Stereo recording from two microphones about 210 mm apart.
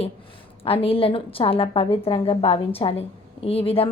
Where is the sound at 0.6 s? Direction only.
25° left (ahead or behind).